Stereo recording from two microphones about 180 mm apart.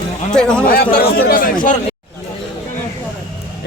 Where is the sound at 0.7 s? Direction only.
55° left (ahead or behind).